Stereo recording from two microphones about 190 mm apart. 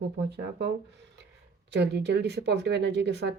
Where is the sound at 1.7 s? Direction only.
65° right (ahead or behind).